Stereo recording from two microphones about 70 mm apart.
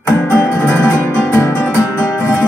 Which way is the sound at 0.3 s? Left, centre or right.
Left.